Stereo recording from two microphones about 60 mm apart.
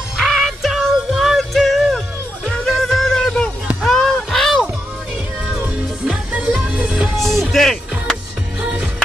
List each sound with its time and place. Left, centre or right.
0.2 s music: centre
2.4 s music: centre
5.6 s music: right
7.2 s music: centre
8.5 s music: right